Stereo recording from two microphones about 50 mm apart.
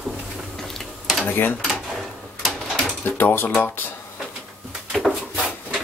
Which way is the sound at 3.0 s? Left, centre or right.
Left.